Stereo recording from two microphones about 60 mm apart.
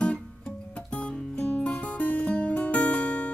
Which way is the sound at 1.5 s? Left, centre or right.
Left.